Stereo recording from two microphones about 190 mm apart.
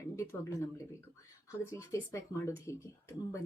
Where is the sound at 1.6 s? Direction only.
15° left (ahead or behind).